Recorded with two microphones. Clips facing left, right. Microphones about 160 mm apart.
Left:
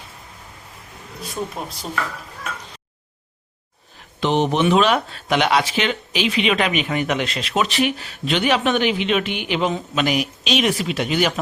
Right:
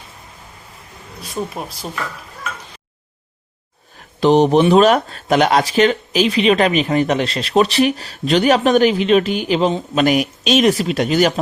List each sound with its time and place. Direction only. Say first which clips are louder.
4.2 s speech: right 7 dB; 40° right (ahead or behind)
10.0 s speech: right 6 dB; 45° right (ahead or behind)